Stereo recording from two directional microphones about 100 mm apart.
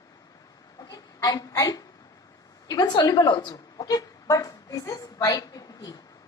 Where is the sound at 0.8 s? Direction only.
40° left (ahead or behind).